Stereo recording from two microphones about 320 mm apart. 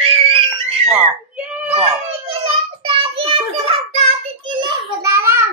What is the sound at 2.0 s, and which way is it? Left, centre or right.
Child singing, centre.